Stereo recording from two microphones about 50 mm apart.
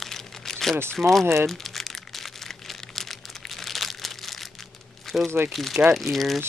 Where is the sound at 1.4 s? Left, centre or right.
Centre.